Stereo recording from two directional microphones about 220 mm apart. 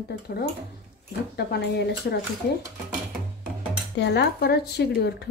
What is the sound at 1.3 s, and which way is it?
Speech, 50° left (ahead or behind).